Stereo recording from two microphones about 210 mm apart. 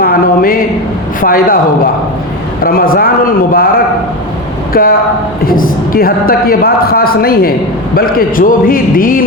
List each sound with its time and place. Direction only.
0.0 s a sound: 45° left (ahead or behind)
1.2 s a man's voice: 40° left (ahead or behind)
2.6 s a man's voice: 45° left (ahead or behind)
4.7 s a woman's voice: 45° left (ahead or behind)